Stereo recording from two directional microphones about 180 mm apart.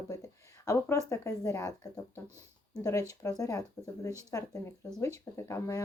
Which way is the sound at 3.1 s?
20° left (ahead or behind).